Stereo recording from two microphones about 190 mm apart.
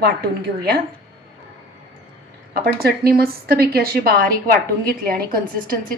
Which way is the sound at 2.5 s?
50° right (ahead or behind).